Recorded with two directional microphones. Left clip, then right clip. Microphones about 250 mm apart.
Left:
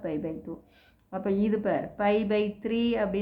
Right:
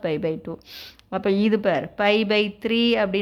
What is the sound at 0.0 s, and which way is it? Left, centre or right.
Speech, right.